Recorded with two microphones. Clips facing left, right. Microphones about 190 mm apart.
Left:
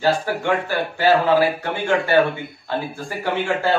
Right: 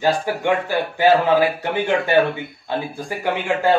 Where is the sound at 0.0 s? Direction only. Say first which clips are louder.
Right 1 dB; 15° right (ahead or behind).